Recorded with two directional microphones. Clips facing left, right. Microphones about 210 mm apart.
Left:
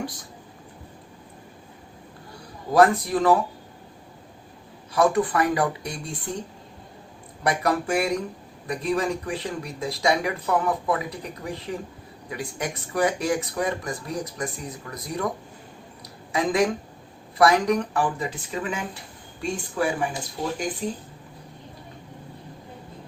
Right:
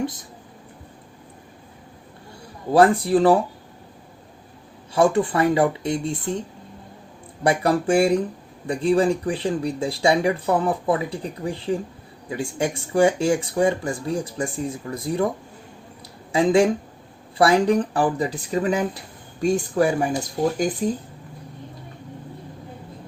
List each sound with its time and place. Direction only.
2.7 s speech: 30° right (ahead or behind)
4.9 s speech: 25° right (ahead or behind)
7.4 s speech: 30° right (ahead or behind)
16.3 s speech: 30° right (ahead or behind)